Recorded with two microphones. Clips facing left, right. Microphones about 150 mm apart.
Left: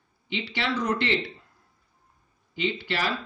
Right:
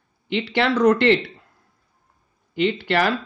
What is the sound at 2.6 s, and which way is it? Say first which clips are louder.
Speech: right 8 dB; 60° right (ahead or behind).